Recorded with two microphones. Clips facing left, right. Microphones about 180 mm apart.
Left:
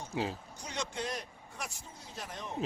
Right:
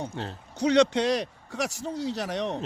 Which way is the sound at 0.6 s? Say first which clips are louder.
Right 18 dB; 75° right (ahead or behind).